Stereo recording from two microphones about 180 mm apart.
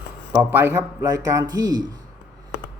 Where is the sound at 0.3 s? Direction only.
10° right (ahead or behind).